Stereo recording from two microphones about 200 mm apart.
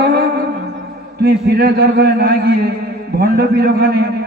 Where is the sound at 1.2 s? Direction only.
50° right (ahead or behind).